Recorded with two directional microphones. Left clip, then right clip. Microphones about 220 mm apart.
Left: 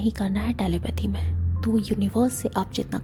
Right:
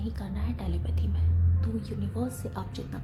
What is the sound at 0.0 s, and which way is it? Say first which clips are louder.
A woman's voice: left 12 dB; 40° left (ahead or behind).